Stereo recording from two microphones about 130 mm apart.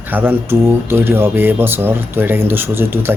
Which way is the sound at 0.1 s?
15° right (ahead or behind).